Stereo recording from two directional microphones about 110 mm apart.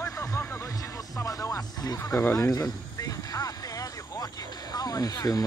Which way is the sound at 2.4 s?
35° left (ahead or behind).